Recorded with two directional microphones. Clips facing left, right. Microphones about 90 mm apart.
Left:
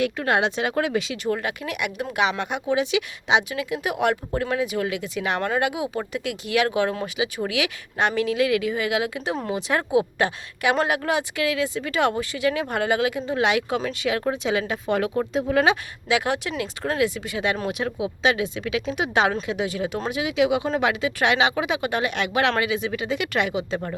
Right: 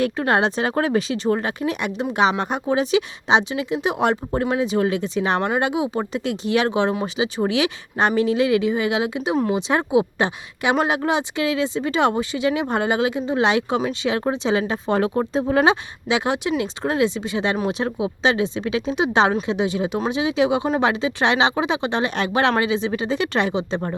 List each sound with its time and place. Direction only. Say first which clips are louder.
0.0 s speech: right 3 dB; 35° right (ahead or behind)